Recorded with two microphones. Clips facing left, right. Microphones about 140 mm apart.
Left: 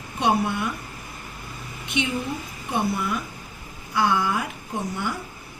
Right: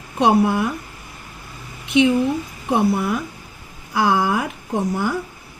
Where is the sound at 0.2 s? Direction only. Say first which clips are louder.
Right 6 dB; 90° right.